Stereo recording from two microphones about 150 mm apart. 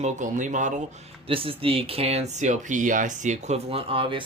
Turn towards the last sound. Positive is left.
turn(degrees=-35)  # may be behind; listen again after turning